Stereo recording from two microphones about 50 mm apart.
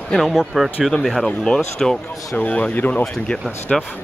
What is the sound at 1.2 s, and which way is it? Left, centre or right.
Speech, centre.